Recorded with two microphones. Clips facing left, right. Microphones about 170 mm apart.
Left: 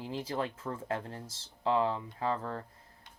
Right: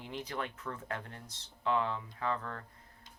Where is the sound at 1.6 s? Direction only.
30° left (ahead or behind).